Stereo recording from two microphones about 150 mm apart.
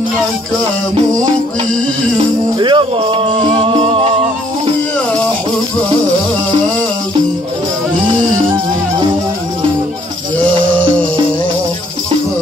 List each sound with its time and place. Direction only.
2.6 s music: 30° right (ahead or behind)